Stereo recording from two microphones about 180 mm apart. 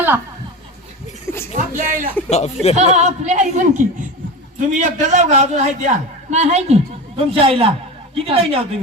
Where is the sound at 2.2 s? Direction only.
35° left (ahead or behind).